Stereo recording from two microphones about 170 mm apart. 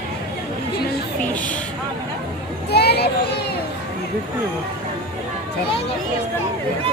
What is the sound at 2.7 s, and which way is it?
Children playing, 70° left (ahead or behind).